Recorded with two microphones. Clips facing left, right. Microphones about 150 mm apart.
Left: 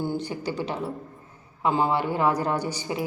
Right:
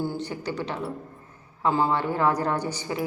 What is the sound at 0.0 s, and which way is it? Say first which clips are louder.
A woman's voice: left 1 dB; 15° left (ahead or behind).